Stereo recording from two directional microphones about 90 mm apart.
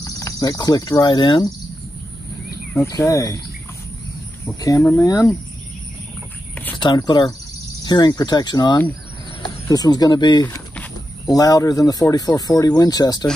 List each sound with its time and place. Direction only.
0.0 s speech: 40° left (ahead or behind); by 1.5 s 55° left (ahead or behind)
3.0 s speech: 40° left (ahead or behind)
4.6 s speech: 40° left (ahead or behind)
6.8 s speech: 55° left (ahead or behind)